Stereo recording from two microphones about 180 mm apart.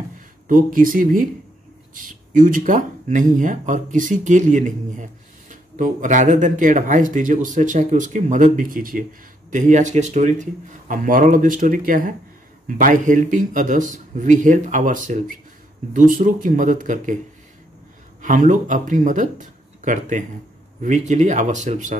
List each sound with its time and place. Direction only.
0.5 s speech: 50° right (ahead or behind)
18.2 s speech: 45° right (ahead or behind)